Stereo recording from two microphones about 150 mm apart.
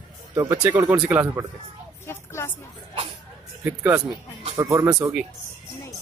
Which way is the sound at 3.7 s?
15° right (ahead or behind).